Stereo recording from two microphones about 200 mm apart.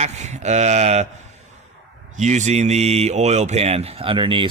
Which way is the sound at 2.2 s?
35° right (ahead or behind).